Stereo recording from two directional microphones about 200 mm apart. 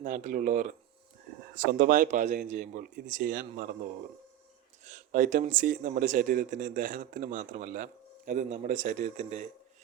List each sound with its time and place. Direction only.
0.0 s speech: 40° right (ahead or behind)
4.8 s speech: 40° right (ahead or behind)